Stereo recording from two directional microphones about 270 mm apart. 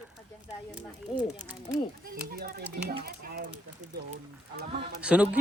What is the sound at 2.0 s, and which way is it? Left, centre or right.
Speech, right.